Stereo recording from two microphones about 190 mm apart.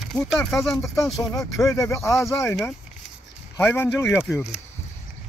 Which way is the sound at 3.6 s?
10° left (ahead or behind).